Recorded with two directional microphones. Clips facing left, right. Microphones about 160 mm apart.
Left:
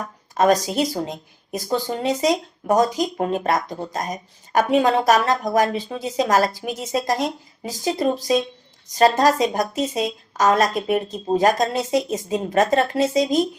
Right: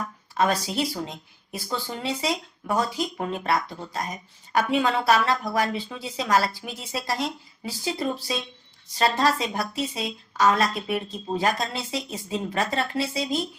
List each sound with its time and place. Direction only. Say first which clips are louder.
0.0 s speech: left 5 dB; 40° left (ahead or behind)